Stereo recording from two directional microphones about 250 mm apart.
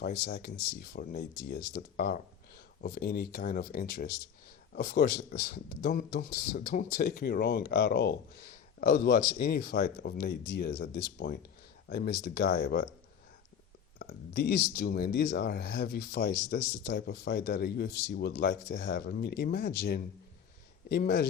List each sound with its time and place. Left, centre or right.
0.0 s speech: left
14.0 s speech: left